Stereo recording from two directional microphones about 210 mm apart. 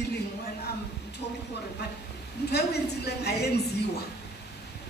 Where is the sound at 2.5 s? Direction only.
50° left (ahead or behind).